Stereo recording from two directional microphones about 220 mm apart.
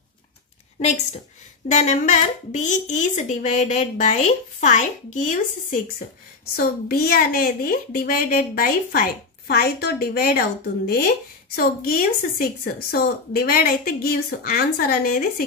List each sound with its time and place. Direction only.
0.7 s a woman's voice: 30° left (ahead or behind)